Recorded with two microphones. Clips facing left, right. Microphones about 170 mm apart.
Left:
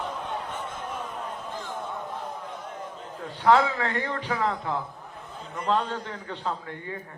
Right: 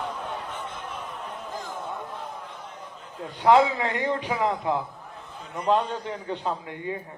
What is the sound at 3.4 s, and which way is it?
Speech, 15° right (ahead or behind).